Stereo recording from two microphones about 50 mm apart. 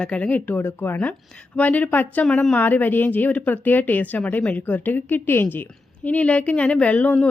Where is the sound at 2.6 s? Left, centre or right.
Left.